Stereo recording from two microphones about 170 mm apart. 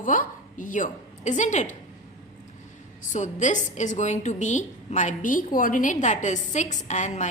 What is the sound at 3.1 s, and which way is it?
A woman's voice, 45° left (ahead or behind).